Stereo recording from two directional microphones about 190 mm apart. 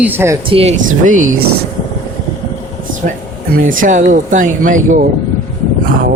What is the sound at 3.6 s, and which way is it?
Speech, 45° right (ahead or behind).